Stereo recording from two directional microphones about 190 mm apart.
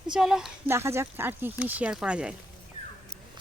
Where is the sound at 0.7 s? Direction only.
15° right (ahead or behind).